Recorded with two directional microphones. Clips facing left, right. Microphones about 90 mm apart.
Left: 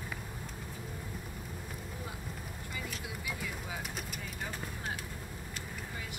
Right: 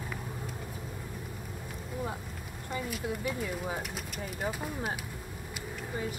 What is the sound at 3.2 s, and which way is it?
Speech, 40° right (ahead or behind).